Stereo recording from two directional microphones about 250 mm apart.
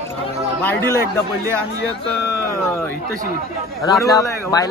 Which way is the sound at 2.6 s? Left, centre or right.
Centre.